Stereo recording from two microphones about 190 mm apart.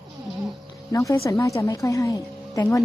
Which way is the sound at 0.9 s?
15° left (ahead or behind).